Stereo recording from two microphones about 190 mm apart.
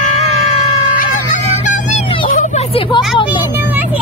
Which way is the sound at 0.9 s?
45° left (ahead or behind).